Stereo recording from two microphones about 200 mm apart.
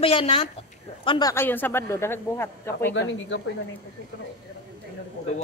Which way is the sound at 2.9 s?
65° left (ahead or behind).